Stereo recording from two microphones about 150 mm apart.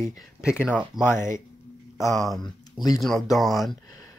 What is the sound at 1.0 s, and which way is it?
Speech, 20° left (ahead or behind).